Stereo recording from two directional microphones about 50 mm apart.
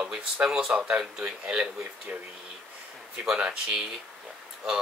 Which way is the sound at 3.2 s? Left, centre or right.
Centre.